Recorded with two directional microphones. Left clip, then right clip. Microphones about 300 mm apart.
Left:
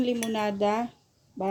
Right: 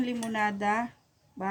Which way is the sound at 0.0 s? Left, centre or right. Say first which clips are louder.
Left 2 dB; right.